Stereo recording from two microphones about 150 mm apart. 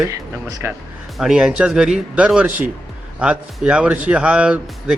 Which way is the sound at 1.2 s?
5° right (ahead or behind).